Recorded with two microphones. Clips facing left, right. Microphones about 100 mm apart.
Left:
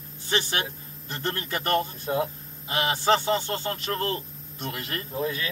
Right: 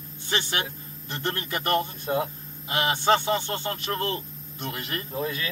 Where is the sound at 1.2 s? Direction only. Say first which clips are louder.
Even; 25° right (ahead or behind).